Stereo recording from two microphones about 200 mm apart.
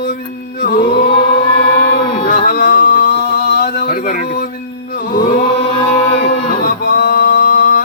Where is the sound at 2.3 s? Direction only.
45° left (ahead or behind).